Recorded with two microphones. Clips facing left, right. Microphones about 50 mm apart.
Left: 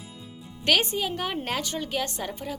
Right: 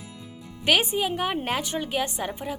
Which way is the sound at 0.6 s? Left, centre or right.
Centre.